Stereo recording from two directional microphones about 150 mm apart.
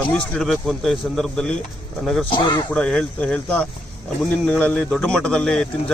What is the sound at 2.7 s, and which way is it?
Speech, 5° left (ahead or behind).